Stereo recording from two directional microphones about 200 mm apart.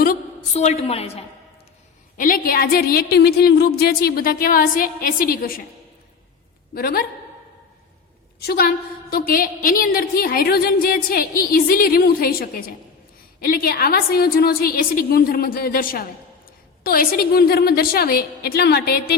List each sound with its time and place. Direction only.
0.5 s a woman's voice: 35° left (ahead or behind)
2.1 s a woman's voice: 45° left (ahead or behind)
6.7 s a woman's voice: 50° left (ahead or behind)
9.0 s a woman's voice: 50° left (ahead or behind)